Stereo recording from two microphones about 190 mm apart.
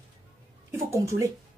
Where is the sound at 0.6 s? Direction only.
15° right (ahead or behind).